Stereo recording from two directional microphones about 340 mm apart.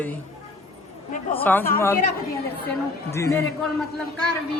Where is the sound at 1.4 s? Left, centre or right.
Centre.